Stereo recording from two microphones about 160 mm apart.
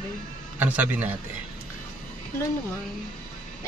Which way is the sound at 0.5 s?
10° right (ahead or behind).